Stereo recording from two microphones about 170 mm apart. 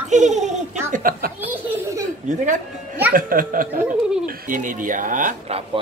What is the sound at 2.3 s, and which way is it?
Speech, 45° right (ahead or behind).